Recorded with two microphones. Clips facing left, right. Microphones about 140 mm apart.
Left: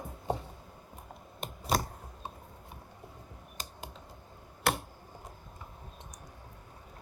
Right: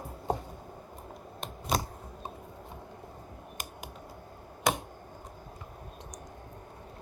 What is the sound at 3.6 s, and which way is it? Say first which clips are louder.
Computer keyboard: even; 15° right (ahead or behind).